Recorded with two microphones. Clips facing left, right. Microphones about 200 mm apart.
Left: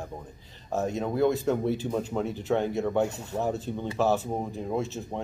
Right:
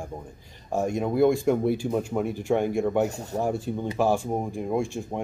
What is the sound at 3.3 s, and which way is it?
Speech, 10° right (ahead or behind).